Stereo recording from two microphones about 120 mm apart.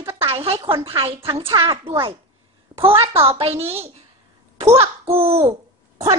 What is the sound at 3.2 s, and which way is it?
A woman's voice, 50° right (ahead or behind).